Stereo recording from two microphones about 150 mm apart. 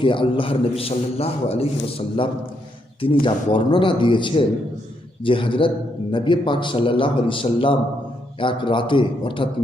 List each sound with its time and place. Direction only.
0.0 s a man's voice: 35° left (ahead or behind)